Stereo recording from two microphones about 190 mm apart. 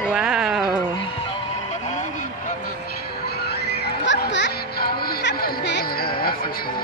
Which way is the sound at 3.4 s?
60° left (ahead or behind).